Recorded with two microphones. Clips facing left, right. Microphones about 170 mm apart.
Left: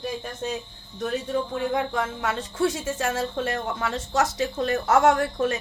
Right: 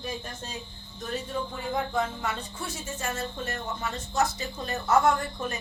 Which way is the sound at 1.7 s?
90° left.